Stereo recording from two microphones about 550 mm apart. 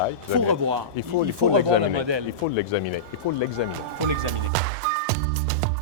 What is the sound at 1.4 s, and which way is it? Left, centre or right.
Speech, right.